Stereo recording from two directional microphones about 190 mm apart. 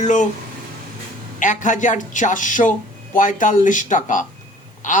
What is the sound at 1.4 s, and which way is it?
Speech, 40° left (ahead or behind).